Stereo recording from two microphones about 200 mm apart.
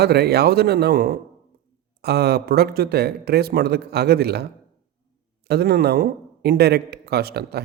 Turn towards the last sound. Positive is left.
turn(degrees=-50)  # may be behind; listen again after turning